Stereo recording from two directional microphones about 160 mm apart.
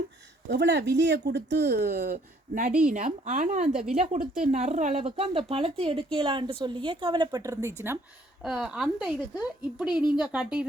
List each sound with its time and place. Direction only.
0.4 s speech: 90° right; by 2.1 s 65° right (ahead or behind)
2.1 s speech: 55° right (ahead or behind)
3.7 s speech: 5° right (ahead or behind)
3.9 s a woman's voice: 45° right (ahead or behind); by 7.9 s 20° right (ahead or behind)
8.4 s speech: 5° right (ahead or behind)